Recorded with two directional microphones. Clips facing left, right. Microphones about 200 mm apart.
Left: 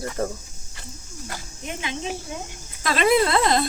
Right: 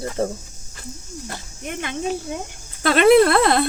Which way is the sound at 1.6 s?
55° right (ahead or behind).